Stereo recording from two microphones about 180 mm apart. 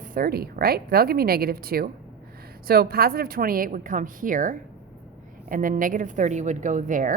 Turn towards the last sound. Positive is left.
turn(degrees=-45)  # may be behind; listen again after turning